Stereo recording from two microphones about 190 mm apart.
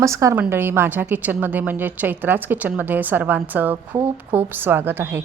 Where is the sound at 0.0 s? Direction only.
15° right (ahead or behind).